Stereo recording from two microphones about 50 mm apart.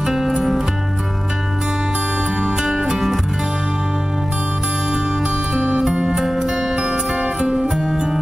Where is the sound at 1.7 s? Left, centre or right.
Right.